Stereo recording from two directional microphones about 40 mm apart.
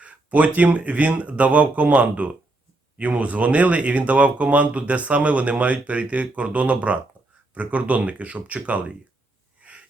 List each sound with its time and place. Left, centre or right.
0.0 s speech: right
9.6 s wheeze: right